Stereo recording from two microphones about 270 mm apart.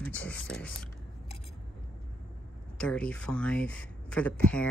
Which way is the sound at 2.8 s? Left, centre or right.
Centre.